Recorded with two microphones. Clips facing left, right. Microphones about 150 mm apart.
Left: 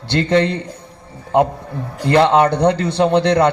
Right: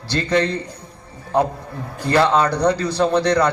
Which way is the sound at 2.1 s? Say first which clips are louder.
Left 4 dB; 20° left (ahead or behind).